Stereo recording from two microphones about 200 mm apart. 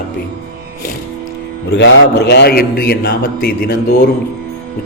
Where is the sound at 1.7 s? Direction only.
60° left (ahead or behind).